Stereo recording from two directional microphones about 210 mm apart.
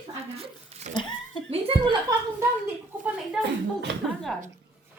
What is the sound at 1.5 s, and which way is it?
Chuckle, 25° right (ahead or behind).